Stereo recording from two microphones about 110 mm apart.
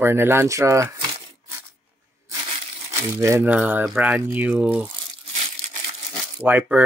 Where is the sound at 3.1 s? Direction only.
25° right (ahead or behind).